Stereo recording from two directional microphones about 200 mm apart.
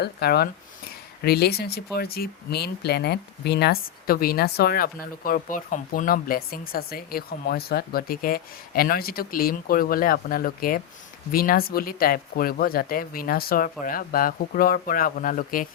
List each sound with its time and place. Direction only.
0.0 s speech: 50° left (ahead or behind)